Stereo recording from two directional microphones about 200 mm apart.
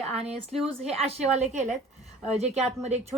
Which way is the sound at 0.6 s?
30° right (ahead or behind).